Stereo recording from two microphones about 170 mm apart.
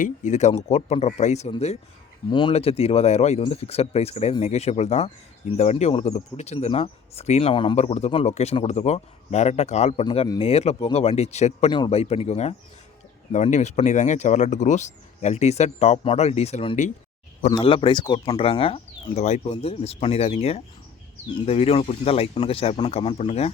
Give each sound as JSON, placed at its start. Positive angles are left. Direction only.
{"t": 0.0, "sound": "speech", "side_deg": 45}
{"t": 7.8, "sound": "speech", "side_deg": 40}
{"t": 17.6, "sound": "speech", "side_deg": 30}